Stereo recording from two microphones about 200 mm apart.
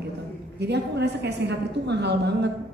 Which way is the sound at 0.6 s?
55° right (ahead or behind).